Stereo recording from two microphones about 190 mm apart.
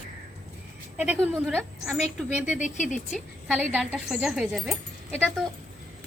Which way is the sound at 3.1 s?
5° right (ahead or behind).